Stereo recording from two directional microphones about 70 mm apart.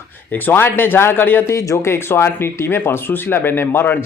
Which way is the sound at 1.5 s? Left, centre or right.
Left.